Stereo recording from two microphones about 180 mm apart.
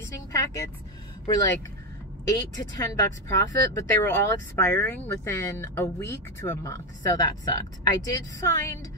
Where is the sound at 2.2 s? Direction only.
20° left (ahead or behind).